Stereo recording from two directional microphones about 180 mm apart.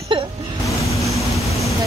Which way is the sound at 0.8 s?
Centre (ahead or behind).